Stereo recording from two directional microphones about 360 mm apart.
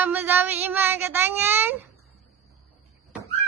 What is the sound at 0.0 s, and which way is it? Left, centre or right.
Child singing, centre.